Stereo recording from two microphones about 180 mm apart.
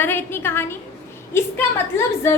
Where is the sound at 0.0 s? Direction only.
10° left (ahead or behind).